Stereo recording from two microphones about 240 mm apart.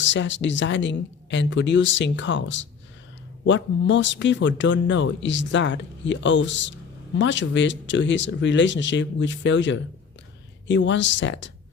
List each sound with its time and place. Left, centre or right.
0.0 s speech: left